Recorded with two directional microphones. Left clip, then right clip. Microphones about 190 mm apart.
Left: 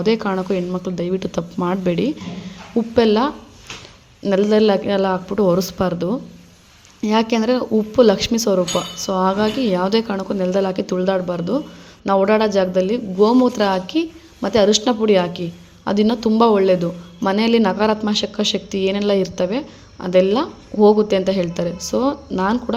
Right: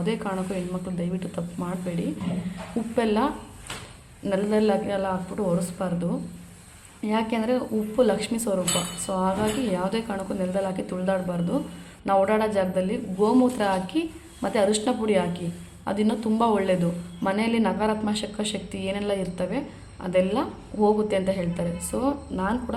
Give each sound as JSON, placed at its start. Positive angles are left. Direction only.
{"t": 0.0, "sound": "a man's voice", "side_deg": 35}